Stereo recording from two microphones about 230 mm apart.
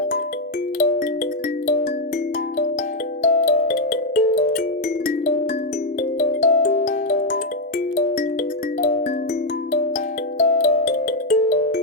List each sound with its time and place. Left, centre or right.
3.2 s music: left
6.1 s music: left
10.3 s music: left